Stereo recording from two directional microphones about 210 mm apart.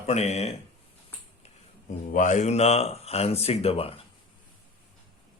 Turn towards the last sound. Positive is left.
turn(degrees=25)  # may be behind; listen again after turning